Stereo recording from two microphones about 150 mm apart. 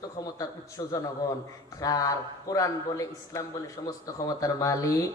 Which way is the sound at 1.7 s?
25° left (ahead or behind).